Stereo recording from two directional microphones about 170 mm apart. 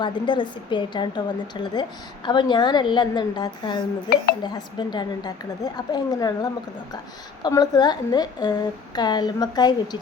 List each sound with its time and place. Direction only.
0.0 s a woman's voice: 30° left (ahead or behind)